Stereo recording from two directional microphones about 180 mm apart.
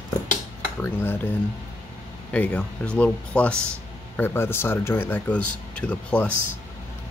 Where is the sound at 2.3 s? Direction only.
10° left (ahead or behind).